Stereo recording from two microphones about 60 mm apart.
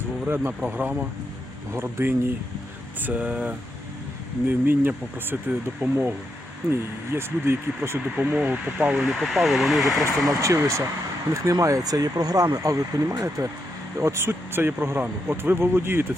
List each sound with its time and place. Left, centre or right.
0.6 s speech: right
1.7 s speech: right
3.0 s speech: right
4.4 s speech: right
6.7 s speech: right
8.4 s speech: right
9.0 s speech: centre
10.2 s speech: right
11.4 s speech: right
14.0 s speech: right